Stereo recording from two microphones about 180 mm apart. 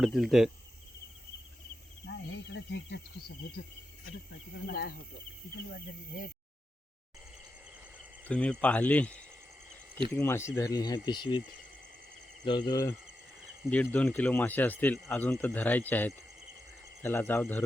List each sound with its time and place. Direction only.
0.0 s speech: centre (ahead or behind)
2.5 s speech: 70° left (ahead or behind)
4.6 s speech: 60° left (ahead or behind)
8.2 s speech: 5° left (ahead or behind)
10.2 s speech: 15° left (ahead or behind)
12.5 s speech: 25° left (ahead or behind)
13.7 s speech: 10° left (ahead or behind)